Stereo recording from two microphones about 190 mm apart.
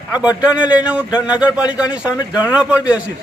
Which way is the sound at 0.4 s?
5° right (ahead or behind).